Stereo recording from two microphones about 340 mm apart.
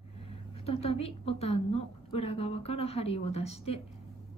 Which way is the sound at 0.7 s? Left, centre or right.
Centre.